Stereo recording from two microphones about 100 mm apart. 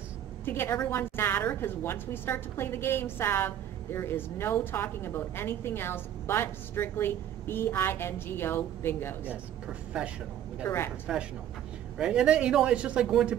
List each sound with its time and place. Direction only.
0.5 s a woman's voice: 20° left (ahead or behind)
9.2 s speech: 15° right (ahead or behind)
10.6 s a woman's voice: 25° left (ahead or behind)
11.1 s speech: 5° right (ahead or behind)